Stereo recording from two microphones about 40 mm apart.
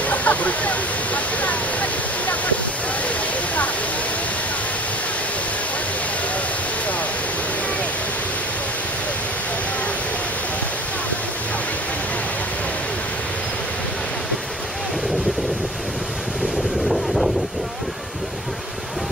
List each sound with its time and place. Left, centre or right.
0.0 s waterfall: left
16.9 s wind noise: centre